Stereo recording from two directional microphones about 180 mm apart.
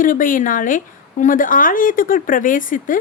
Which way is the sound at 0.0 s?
50° left (ahead or behind).